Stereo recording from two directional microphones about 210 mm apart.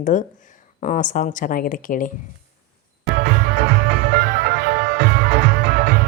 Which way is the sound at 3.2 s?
45° right (ahead or behind).